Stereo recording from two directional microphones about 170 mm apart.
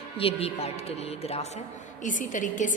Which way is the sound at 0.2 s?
35° left (ahead or behind).